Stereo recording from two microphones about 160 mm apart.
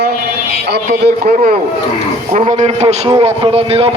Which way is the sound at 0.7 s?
75° right (ahead or behind).